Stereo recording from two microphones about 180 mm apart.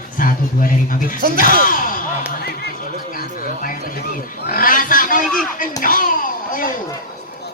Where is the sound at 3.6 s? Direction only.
50° left (ahead or behind).